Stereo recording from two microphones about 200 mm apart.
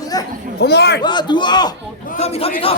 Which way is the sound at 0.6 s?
55° left (ahead or behind).